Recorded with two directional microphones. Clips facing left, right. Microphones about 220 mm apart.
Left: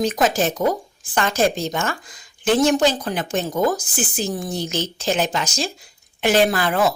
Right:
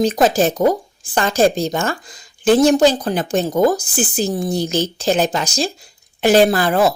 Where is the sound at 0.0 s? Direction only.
30° right (ahead or behind).